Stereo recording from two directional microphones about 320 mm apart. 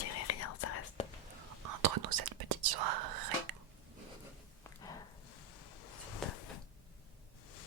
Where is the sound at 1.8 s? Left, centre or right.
Right.